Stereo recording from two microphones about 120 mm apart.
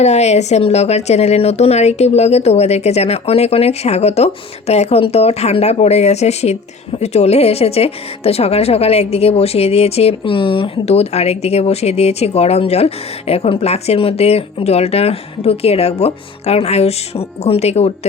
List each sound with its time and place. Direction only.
0.0 s speech: 65° left (ahead or behind)